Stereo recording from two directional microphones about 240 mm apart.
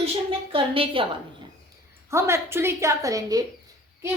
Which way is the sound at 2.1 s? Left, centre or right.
Centre.